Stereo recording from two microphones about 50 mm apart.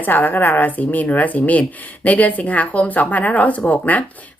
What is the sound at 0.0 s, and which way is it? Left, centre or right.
Speech, left.